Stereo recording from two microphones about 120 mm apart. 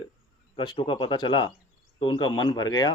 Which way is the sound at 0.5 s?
40° left (ahead or behind).